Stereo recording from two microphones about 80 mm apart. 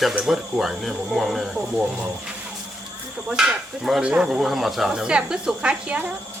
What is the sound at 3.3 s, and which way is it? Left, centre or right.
Speech, centre.